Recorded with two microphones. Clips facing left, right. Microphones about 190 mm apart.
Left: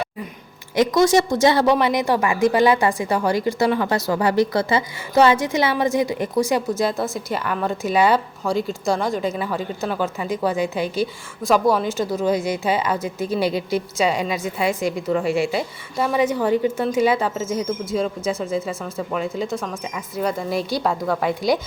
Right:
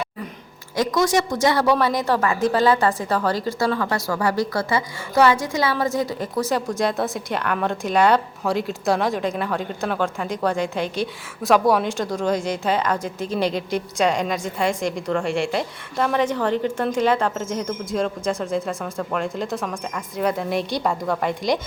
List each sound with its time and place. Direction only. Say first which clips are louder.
0.8 s a woman's voice: left 4 dB; 25° left (ahead or behind); by 21.6 s 5° left (ahead or behind)